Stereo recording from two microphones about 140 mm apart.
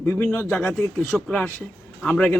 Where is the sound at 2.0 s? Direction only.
10° left (ahead or behind).